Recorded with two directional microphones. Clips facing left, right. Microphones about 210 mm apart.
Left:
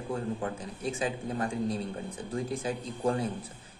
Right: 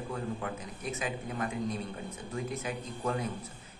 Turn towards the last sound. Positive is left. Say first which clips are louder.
# left 4 dB
turn(degrees=30)  # may be behind; listen again after turning